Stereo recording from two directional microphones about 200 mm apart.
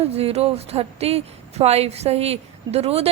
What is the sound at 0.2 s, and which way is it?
A woman's voice, 30° right (ahead or behind).